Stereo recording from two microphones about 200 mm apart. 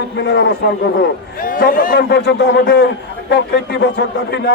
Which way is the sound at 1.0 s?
45° left (ahead or behind).